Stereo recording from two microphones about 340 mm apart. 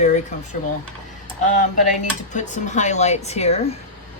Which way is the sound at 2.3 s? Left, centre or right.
Left.